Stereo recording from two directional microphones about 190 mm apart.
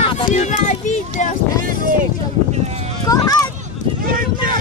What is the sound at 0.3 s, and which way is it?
Speech, 40° left (ahead or behind).